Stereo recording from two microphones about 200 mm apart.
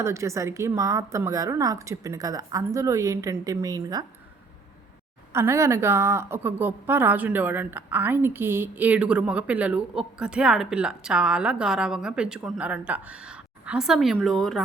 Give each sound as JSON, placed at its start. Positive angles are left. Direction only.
{"t": 0.0, "sound": "a woman's voice", "side_deg": -15}
{"t": 5.3, "sound": "a woman's voice", "side_deg": -10}